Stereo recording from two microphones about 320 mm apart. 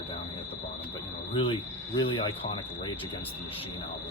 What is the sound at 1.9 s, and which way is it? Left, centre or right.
Speech, centre.